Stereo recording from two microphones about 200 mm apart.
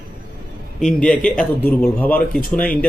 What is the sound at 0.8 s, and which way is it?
A man's voice, 5° left (ahead or behind).